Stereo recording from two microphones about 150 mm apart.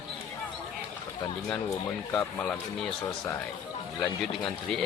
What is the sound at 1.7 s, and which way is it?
Speech, 20° left (ahead or behind).